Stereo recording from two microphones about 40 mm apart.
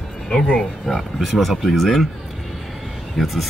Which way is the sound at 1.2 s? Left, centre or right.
Centre.